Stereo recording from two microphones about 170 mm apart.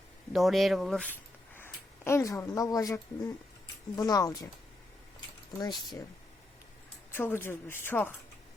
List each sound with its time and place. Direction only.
0.3 s speech: centre (ahead or behind)
1.5 s speech: 15° left (ahead or behind)
5.5 s speech: 20° left (ahead or behind)
7.1 s speech: 15° left (ahead or behind)